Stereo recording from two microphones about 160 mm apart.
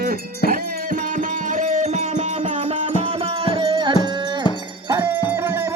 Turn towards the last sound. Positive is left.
turn(degrees=-15)  # may be behind; listen again after turning